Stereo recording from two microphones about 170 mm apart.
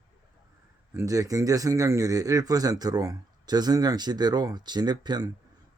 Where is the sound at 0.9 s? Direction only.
20° right (ahead or behind).